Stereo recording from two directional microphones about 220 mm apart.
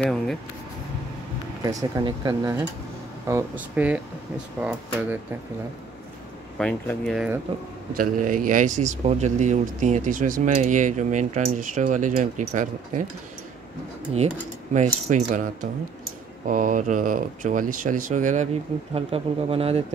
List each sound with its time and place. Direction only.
0.0 s speech: centre (ahead or behind)
1.6 s speech: 15° right (ahead or behind)
6.6 s speech: 5° left (ahead or behind)
7.9 s speech: 40° right (ahead or behind)
14.7 s speech: 30° right (ahead or behind)